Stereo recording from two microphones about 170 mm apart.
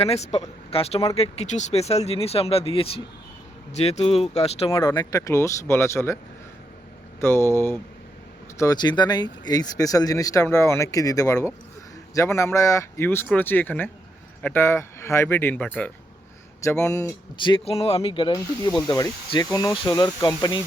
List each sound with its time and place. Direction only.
0.0 s speech: 40° left (ahead or behind)
4.8 s speech: 20° left (ahead or behind)
7.2 s speech: 15° left (ahead or behind)
16.8 s speech: 20° left (ahead or behind)